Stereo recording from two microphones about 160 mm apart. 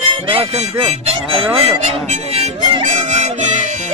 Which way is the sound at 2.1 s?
40° right (ahead or behind).